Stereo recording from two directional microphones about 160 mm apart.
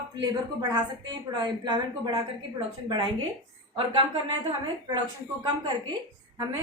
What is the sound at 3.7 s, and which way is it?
Speech, 30° right (ahead or behind).